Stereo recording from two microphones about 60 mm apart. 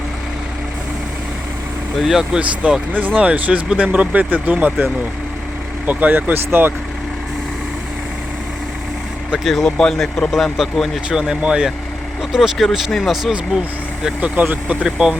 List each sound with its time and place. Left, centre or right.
2.0 s speech: centre; by 6.7 s right
9.4 s speech: centre
9.6 s speech: centre
10.3 s speech: centre
11.1 s speech: centre
14.2 s speech: right
14.8 s speech: centre